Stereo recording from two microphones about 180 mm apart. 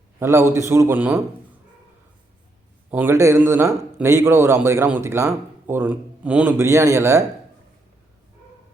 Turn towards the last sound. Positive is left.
turn(degrees=-15)  # may be behind; listen again after turning